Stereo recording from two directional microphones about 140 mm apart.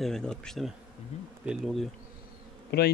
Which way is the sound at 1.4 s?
Centre (ahead or behind).